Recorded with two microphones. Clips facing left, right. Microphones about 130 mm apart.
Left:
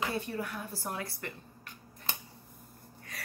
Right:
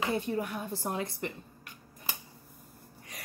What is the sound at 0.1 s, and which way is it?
A woman's voice, 20° right (ahead or behind).